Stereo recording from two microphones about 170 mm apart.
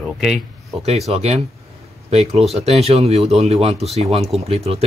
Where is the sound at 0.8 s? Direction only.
40° right (ahead or behind).